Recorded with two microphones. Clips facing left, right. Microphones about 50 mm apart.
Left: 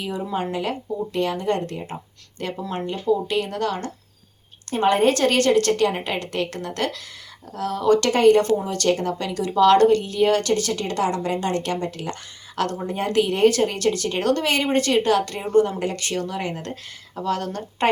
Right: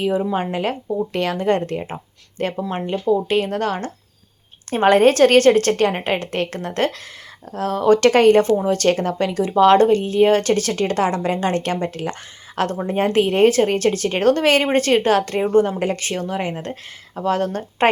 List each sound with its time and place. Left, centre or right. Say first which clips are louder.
0.1 s a woman's voice: right 5 dB; right
1.1 s speech: left 1 dB; right
1.4 s a woman's voice: right 5 dB; right
2.6 s a woman's voice: right 4 dB; right
4.7 s a woman's voice: right 5 dB; right
10.5 s a woman's voice: right 4 dB; right